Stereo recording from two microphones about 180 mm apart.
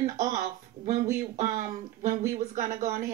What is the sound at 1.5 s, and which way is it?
Speech, 40° right (ahead or behind).